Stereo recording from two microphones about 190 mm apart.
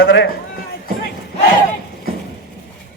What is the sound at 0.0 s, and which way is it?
Speech, 65° left (ahead or behind).